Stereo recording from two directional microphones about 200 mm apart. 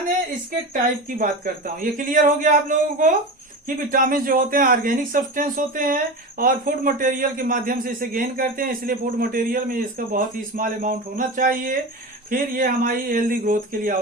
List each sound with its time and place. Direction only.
1.2 s a man's voice: 45° right (ahead or behind)